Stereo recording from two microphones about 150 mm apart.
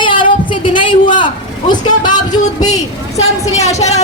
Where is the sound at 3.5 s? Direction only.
45° left (ahead or behind).